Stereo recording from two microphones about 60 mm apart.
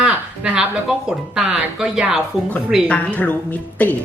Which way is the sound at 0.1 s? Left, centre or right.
Right.